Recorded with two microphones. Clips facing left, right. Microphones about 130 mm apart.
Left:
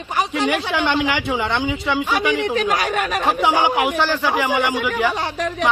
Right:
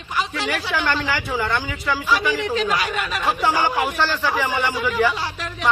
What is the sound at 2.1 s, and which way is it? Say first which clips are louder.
Speech: right 1 dB; 70° left (ahead or behind).